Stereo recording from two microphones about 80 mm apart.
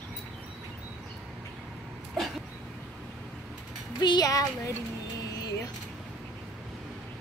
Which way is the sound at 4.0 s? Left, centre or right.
Left.